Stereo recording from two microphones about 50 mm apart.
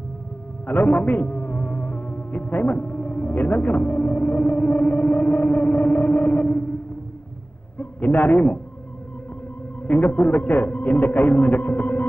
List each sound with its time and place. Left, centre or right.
0.7 s speech: left
7.8 s a man's voice: left
9.8 s a man's voice: left